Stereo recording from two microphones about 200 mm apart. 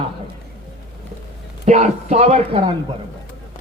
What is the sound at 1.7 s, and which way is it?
Speech, 35° right (ahead or behind).